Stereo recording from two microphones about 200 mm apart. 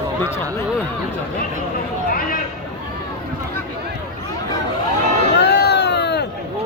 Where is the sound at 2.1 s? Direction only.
45° left (ahead or behind).